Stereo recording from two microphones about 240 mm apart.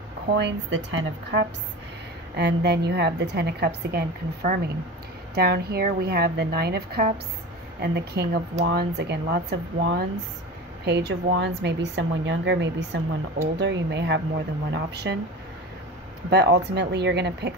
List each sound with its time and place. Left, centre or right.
0.4 s a woman's voice: right
16.3 s a woman's voice: right